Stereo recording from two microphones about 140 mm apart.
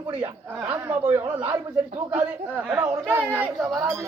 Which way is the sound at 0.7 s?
15° right (ahead or behind).